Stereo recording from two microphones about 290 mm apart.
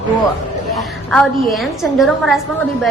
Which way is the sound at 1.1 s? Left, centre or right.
Centre.